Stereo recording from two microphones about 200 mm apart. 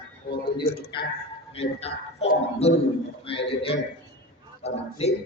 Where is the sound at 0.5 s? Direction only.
25° left (ahead or behind).